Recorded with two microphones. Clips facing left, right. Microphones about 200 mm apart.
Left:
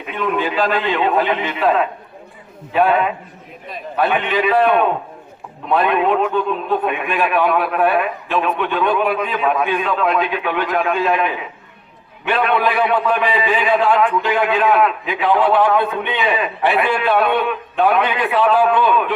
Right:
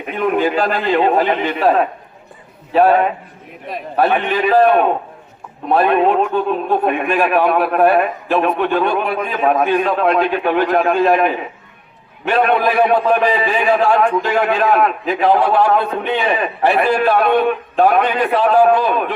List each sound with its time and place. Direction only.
0.1 s a man's voice: 50° right (ahead or behind)